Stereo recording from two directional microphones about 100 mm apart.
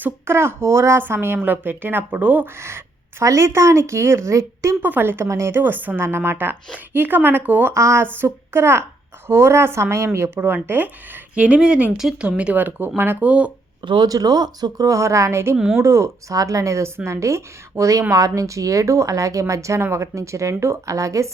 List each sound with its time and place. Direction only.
0.0 s a woman's voice: 25° right (ahead or behind)
4.8 s a woman's voice: 20° right (ahead or behind)
13.8 s speech: 55° right (ahead or behind)
14.1 s a woman's voice: 40° right (ahead or behind)
15.5 s speech: 5° right (ahead or behind)
15.8 s a woman's voice: 30° right (ahead or behind)